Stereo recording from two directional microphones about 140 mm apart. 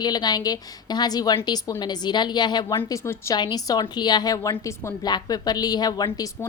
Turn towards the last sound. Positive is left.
turn(degrees=30)  # may be behind; listen again after turning